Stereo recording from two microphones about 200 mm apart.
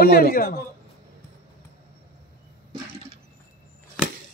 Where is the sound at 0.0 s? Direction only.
50° left (ahead or behind).